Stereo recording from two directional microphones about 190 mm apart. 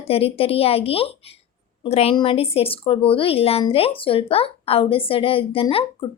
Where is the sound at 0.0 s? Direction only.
30° left (ahead or behind).